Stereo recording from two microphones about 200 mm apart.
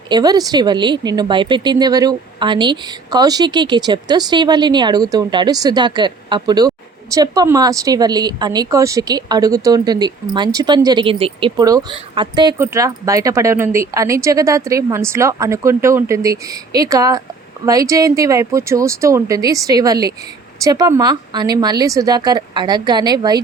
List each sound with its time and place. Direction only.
0.1 s a woman's voice: 20° right (ahead or behind)